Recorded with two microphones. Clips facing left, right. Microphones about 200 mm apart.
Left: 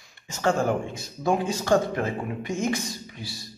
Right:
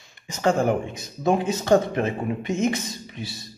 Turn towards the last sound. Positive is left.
turn(degrees=-25)  # may be behind; listen again after turning